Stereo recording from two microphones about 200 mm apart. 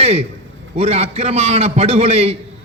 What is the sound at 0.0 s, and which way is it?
A man's voice, 30° right (ahead or behind).